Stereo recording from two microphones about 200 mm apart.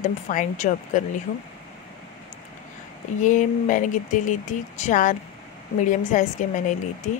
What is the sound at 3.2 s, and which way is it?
A woman's voice, 40° left (ahead or behind).